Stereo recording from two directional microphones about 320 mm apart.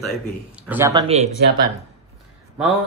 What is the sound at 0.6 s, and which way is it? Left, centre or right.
Speech, centre.